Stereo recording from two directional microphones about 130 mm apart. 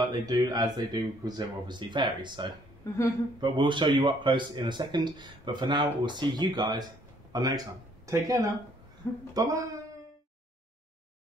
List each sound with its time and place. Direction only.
0.1 s speech: 30° right (ahead or behind)